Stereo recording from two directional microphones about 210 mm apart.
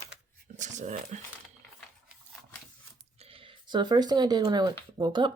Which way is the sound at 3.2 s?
25° right (ahead or behind).